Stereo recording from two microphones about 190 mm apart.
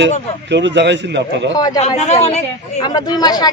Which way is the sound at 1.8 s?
35° left (ahead or behind).